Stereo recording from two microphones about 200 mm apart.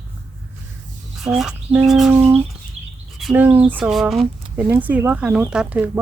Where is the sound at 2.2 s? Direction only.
30° right (ahead or behind).